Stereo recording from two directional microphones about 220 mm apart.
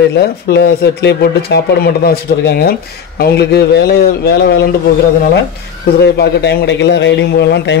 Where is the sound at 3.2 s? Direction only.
50° left (ahead or behind).